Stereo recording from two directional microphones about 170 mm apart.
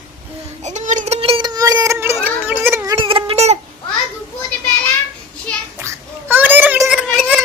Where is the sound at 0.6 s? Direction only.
45° right (ahead or behind); by 3.0 s 15° right (ahead or behind).